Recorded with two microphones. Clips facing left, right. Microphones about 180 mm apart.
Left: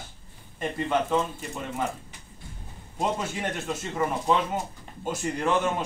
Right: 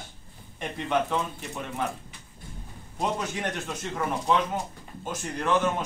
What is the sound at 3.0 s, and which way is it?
Speech, 5° left (ahead or behind).